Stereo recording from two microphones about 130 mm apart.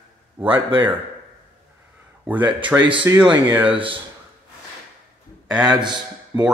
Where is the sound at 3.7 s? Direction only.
40° right (ahead or behind).